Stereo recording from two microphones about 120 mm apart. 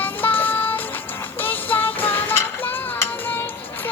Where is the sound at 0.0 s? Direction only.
15° left (ahead or behind).